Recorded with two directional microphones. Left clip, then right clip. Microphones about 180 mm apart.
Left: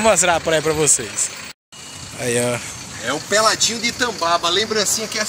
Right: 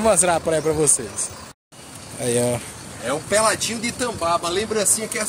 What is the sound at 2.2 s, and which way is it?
Speech, 10° right (ahead or behind).